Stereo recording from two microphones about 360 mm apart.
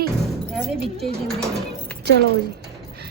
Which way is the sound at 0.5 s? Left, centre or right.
Centre.